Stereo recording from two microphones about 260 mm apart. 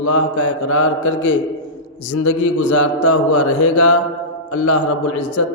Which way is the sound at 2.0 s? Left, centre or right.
Left.